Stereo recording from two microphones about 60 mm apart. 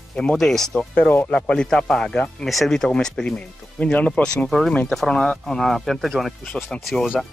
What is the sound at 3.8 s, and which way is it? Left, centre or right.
Speech, left.